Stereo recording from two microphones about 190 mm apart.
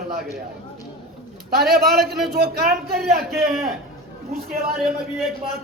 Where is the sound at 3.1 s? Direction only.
55° right (ahead or behind).